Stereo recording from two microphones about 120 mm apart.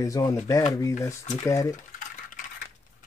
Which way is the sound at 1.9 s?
90° left.